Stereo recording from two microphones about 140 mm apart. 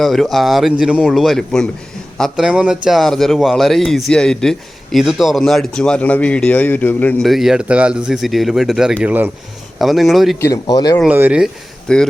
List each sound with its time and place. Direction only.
0.0 s a man's voice: centre (ahead or behind)
7.3 s a man's voice: centre (ahead or behind)
9.7 s a man's voice: centre (ahead or behind)
10.4 s speech: 25° left (ahead or behind)
11.0 s speech: 10° right (ahead or behind)
11.9 s a man's voice: 5° left (ahead or behind)